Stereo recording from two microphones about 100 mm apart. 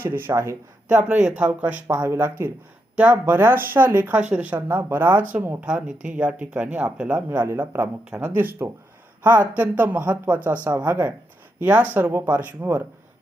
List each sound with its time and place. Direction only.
0.0 s speech: 20° right (ahead or behind)
0.9 s speech: 10° right (ahead or behind)
1.9 s speech: 25° right (ahead or behind)
2.9 s speech: 15° right (ahead or behind)
4.7 s speech: 25° right (ahead or behind)
7.3 s speech: 25° right (ahead or behind)